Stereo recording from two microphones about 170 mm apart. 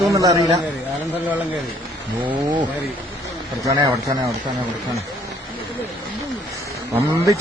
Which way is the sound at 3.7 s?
20° right (ahead or behind).